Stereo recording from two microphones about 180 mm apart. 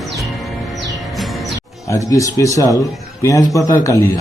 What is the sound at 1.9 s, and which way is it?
A man's voice, 15° left (ahead or behind).